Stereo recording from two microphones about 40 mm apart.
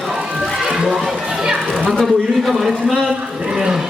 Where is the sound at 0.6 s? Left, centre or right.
Centre.